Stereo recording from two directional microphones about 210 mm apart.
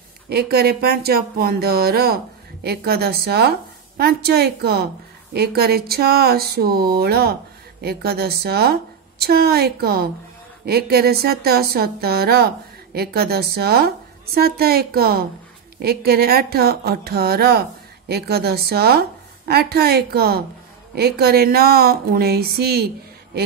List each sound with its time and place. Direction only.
0.3 s speech: 50° right (ahead or behind)